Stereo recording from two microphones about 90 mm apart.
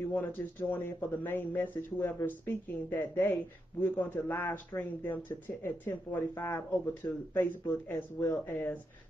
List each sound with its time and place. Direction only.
0.1 s speech: 20° left (ahead or behind)